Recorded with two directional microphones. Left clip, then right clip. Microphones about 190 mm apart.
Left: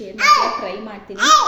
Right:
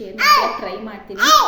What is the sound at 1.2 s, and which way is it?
Speech, 15° right (ahead or behind).